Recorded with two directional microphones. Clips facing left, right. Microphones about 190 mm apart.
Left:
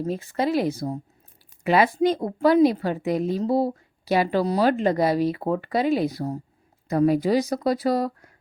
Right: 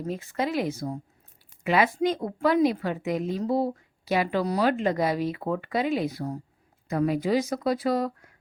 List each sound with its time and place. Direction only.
0.0 s a woman's voice: 35° left (ahead or behind)